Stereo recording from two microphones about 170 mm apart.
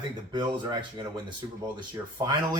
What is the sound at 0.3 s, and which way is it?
A man's voice, 25° right (ahead or behind).